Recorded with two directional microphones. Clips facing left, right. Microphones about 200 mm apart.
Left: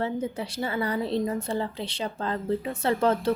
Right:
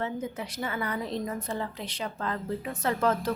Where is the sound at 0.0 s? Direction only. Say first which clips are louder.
Left 4 dB; 30° left (ahead or behind).